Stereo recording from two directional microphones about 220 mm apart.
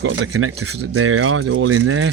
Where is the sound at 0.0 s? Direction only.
75° right (ahead or behind).